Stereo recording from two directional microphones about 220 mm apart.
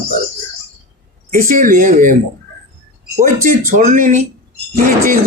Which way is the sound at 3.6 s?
40° right (ahead or behind).